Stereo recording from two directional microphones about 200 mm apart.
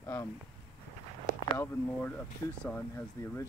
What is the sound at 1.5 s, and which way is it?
Speech, 10° left (ahead or behind).